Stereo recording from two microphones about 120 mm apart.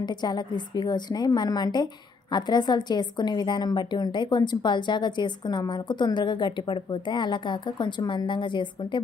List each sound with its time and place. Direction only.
0.0 s a woman's voice: 35° left (ahead or behind)